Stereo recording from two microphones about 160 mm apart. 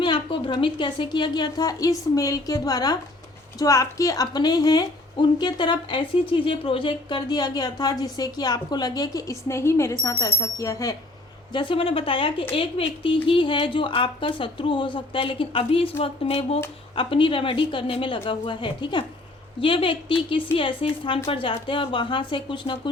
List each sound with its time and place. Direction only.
0.0 s a woman's voice: 30° left (ahead or behind)
11.5 s a woman's voice: 30° left (ahead or behind)